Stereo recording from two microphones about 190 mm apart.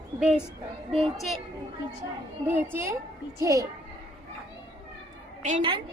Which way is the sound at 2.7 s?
15° right (ahead or behind).